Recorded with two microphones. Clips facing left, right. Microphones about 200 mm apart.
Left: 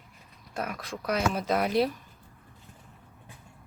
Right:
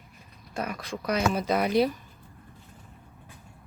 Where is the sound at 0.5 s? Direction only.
Centre (ahead or behind).